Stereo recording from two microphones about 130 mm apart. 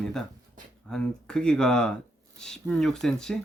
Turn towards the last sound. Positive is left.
turn(degrees=5)  # may be behind; listen again after turning